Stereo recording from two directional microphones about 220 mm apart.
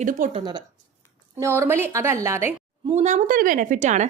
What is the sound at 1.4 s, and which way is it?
A woman's voice, 10° right (ahead or behind).